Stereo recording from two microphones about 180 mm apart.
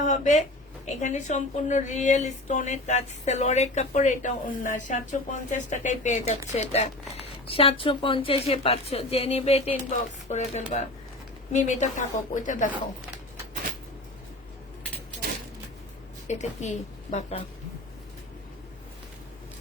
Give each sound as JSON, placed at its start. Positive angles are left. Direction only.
{"t": 0.0, "sound": "a woman's voice", "side_deg": 40}
{"t": 16.2, "sound": "a woman's voice", "side_deg": 40}